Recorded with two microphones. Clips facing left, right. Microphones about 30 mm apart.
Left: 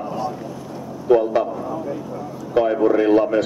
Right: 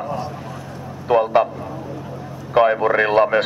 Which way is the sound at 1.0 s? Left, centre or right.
Right.